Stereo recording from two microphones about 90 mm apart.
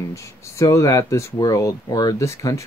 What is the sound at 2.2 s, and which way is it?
Speech, 35° left (ahead or behind).